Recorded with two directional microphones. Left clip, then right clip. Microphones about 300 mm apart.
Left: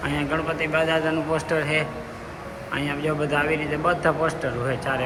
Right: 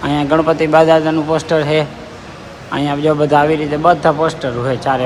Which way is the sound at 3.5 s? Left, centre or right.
Right.